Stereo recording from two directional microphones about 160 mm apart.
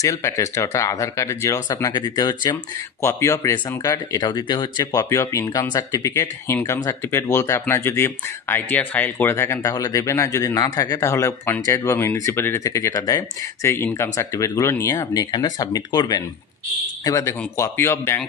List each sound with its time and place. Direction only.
0.0 s speech: 20° left (ahead or behind)